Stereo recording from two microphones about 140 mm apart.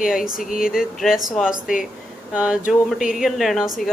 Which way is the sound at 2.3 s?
5° right (ahead or behind).